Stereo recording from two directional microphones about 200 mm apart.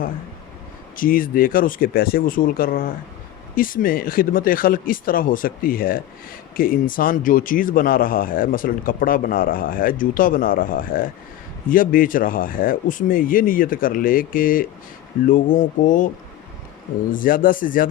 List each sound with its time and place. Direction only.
0.9 s speech: 45° left (ahead or behind)
17.1 s speech: 45° left (ahead or behind)